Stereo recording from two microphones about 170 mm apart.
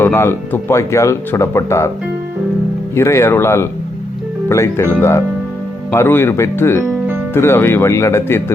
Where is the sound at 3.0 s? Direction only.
15° left (ahead or behind).